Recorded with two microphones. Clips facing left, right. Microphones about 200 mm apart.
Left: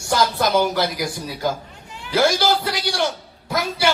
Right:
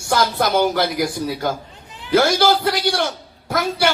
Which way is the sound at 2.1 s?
55° right (ahead or behind).